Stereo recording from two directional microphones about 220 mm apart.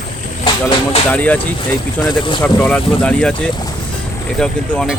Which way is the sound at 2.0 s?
20° left (ahead or behind).